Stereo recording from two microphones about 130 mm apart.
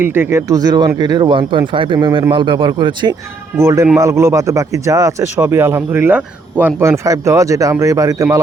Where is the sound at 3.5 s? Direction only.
25° right (ahead or behind).